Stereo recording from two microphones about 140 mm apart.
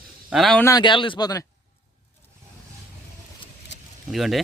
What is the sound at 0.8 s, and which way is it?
Speech, 35° left (ahead or behind).